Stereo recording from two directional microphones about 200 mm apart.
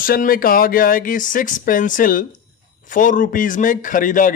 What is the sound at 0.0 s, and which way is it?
A man's voice, 45° left (ahead or behind).